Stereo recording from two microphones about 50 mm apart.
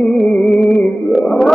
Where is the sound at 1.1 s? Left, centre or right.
Centre.